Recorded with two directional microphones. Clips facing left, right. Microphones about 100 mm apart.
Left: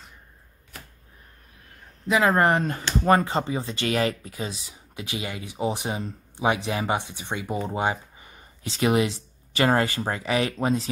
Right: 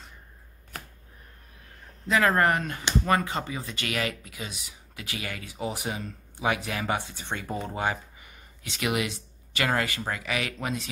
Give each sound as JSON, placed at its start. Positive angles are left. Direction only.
{"t": 2.0, "sound": "speech", "side_deg": 15}